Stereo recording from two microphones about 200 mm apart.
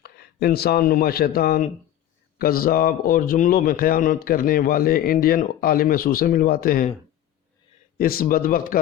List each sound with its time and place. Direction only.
0.0 s speech: 55° left (ahead or behind)
7.9 s speech: 45° left (ahead or behind)